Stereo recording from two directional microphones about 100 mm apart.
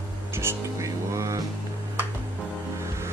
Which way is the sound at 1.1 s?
30° right (ahead or behind).